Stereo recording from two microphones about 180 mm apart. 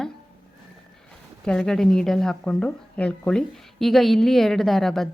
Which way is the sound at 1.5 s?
5° left (ahead or behind).